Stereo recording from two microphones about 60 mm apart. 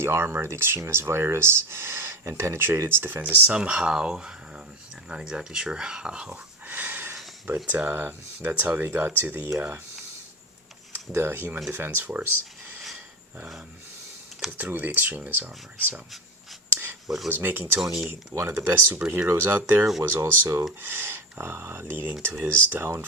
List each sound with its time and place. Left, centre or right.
0.0 s speech: right
3.5 s speech: centre
6.3 s a sound: right
7.4 s speech: right
10.9 s speech: right
14.6 s speech: right
17.2 s speech: right
17.7 s speech: centre
18.1 s speech: right